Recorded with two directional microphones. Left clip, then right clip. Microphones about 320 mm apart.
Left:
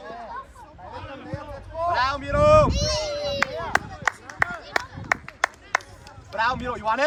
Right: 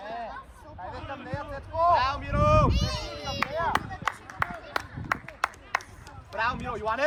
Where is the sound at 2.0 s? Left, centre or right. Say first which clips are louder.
Left 5 dB; centre.